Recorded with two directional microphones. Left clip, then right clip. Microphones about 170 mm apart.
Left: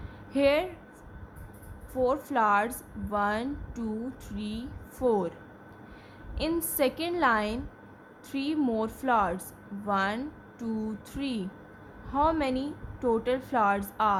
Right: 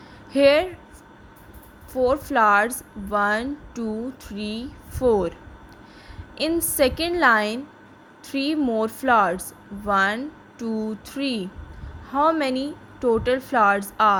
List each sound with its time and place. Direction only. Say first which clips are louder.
0.3 s speech: right 8 dB; 25° right (ahead or behind)
1.9 s speech: right 6 dB; 20° right (ahead or behind)
6.5 s speech: right 7 dB; 20° right (ahead or behind)